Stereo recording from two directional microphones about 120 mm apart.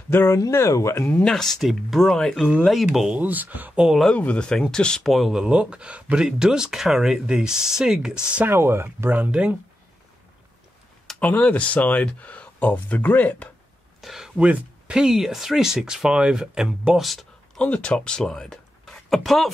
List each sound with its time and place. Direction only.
0.1 s speech: 20° left (ahead or behind)
1.2 s speech: 5° left (ahead or behind)
3.0 s speech: 15° right (ahead or behind)
4.1 s speech: 10° left (ahead or behind); by 8.5 s 10° right (ahead or behind)
8.5 s speech: 20° right (ahead or behind)
11.1 s speech: 10° left (ahead or behind)
14.0 s speech: 5° right (ahead or behind)